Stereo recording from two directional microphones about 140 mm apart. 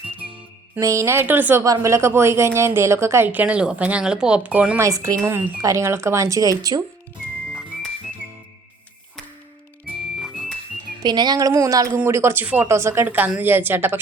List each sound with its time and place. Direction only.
0.8 s a woman's voice: 20° right (ahead or behind)
4.8 s speech: 25° right (ahead or behind)
10.2 s music: 5° right (ahead or behind)
11.0 s a woman's voice: 30° right (ahead or behind); by 14.0 s 15° right (ahead or behind)